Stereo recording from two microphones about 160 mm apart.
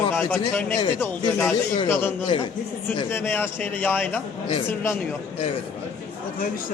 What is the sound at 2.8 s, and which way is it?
A man's voice, 15° left (ahead or behind).